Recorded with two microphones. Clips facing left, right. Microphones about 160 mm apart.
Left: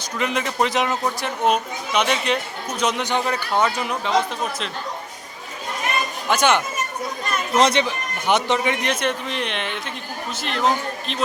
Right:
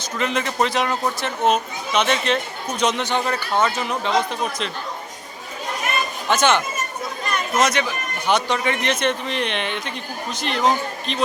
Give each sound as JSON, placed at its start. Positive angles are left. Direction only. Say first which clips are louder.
{"t": 0.2, "sound": "a man's voice", "louder": "even", "side_deg": 10}
{"t": 6.2, "sound": "a man's voice", "louder": "even", "side_deg": 10}
{"t": 7.5, "sound": "a man's voice", "louder": "left 3 dB", "side_deg": 30}